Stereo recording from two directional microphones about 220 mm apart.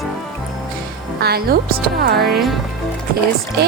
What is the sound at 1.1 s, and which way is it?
Speech, 45° right (ahead or behind).